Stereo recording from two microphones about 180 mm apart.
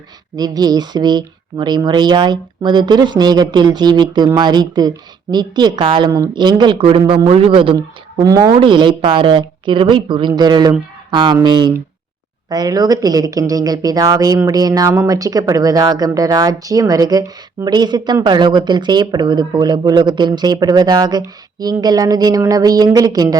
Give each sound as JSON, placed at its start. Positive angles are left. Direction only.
{"t": 0.3, "sound": "a woman's voice", "side_deg": -20}